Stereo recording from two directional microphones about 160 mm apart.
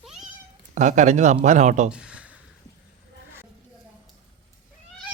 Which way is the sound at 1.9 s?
5° right (ahead or behind).